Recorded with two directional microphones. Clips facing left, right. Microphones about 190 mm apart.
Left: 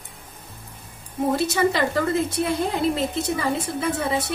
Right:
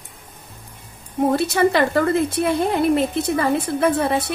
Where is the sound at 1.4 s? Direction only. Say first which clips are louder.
Right 3 dB; 60° right (ahead or behind).